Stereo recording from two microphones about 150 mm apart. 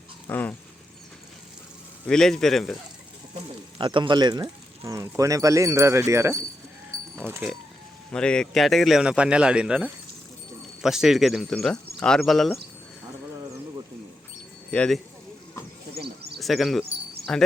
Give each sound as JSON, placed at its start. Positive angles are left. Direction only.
{"t": 0.3, "sound": "speech", "side_deg": 10}
{"t": 2.0, "sound": "a man's voice", "side_deg": 5}
{"t": 3.8, "sound": "speech", "side_deg": -35}
{"t": 8.1, "sound": "a man's voice", "side_deg": 5}
{"t": 14.7, "sound": "a man's voice", "side_deg": 5}
{"t": 16.0, "sound": "a sound", "side_deg": -90}
{"t": 16.4, "sound": "speech", "side_deg": 0}